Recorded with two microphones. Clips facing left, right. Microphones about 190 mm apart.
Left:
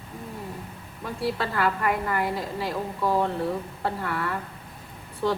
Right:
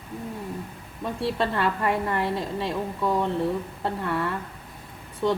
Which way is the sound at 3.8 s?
25° right (ahead or behind).